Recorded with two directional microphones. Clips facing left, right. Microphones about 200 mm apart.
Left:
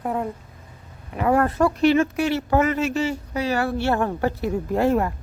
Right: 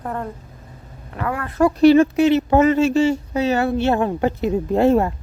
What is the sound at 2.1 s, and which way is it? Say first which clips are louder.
Speech: right 6 dB; 20° right (ahead or behind).